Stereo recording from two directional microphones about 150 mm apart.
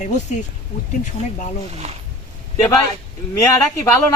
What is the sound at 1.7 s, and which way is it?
Speech, 45° right (ahead or behind).